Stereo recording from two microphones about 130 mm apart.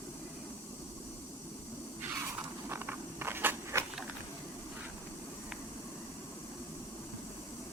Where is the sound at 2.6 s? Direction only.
15° right (ahead or behind).